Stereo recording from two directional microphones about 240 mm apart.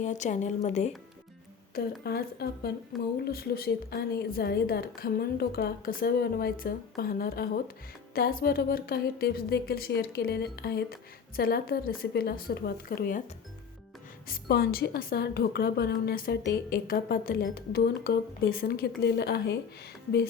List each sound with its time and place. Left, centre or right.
0.0 s a woman's voice: left
1.7 s a woman's voice: left
14.3 s a woman's voice: left